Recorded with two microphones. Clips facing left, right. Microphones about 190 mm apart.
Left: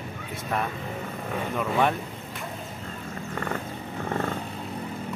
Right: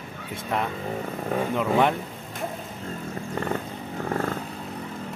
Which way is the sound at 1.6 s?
15° right (ahead or behind).